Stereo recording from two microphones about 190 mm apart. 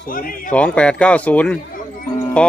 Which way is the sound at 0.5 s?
5° left (ahead or behind).